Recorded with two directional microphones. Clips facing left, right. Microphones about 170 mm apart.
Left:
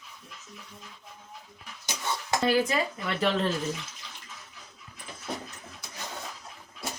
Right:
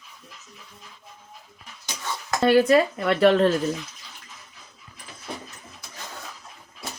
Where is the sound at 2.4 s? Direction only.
65° right (ahead or behind).